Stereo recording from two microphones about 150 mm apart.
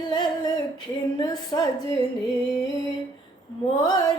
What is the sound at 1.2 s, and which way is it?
Speech, 25° left (ahead or behind).